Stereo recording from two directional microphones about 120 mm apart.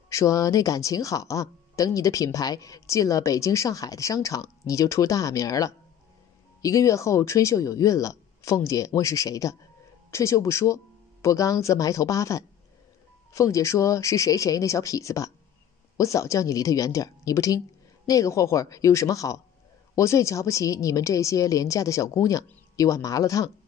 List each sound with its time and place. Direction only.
0.1 s speech: 30° left (ahead or behind)